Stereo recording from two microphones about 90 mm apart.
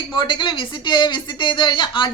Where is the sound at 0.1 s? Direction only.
60° left (ahead or behind).